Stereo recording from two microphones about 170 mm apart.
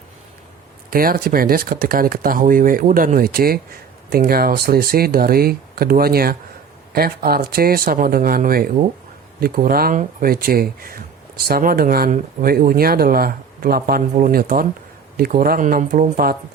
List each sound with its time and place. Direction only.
0.9 s speech: 60° right (ahead or behind)